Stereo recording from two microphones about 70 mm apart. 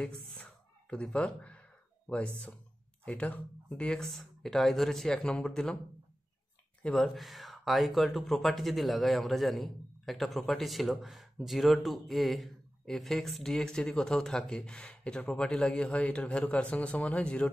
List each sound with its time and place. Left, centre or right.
0.0 s a sound: centre
2.0 s speech: centre
4.0 s speech: centre
6.8 s speech: centre